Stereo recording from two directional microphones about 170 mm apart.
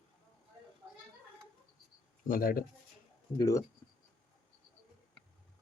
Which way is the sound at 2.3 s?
55° left (ahead or behind).